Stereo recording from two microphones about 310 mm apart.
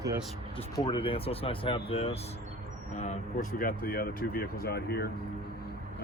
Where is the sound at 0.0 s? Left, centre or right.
Centre.